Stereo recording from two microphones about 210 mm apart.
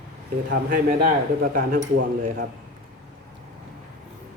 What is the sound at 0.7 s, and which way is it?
Speech, 40° right (ahead or behind).